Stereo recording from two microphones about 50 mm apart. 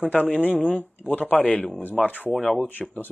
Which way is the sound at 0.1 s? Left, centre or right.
Left.